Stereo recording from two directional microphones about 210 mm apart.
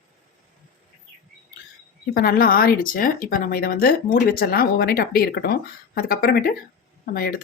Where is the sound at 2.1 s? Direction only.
45° left (ahead or behind).